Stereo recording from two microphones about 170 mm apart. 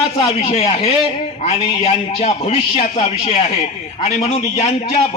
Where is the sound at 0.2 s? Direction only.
35° left (ahead or behind).